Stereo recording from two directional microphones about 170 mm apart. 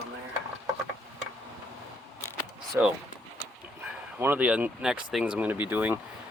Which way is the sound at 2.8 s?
15° right (ahead or behind).